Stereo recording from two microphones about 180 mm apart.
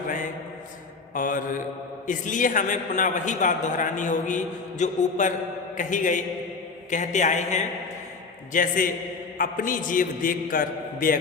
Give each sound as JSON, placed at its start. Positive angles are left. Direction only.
{"t": 1.1, "sound": "a man's voice", "side_deg": 50}